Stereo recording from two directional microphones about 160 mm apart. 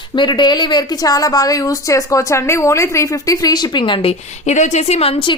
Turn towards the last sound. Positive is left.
turn(degrees=35)  # may be behind; listen again after turning